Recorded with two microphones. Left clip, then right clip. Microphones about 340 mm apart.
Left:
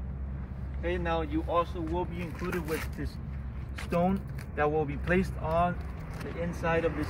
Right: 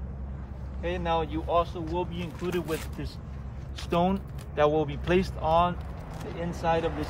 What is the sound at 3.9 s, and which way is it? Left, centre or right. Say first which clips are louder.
Speech: right 3 dB; right.